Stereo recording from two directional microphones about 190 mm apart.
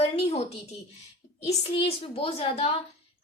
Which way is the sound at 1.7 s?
30° left (ahead or behind).